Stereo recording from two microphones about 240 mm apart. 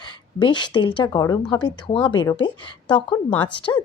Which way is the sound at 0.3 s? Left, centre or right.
Centre.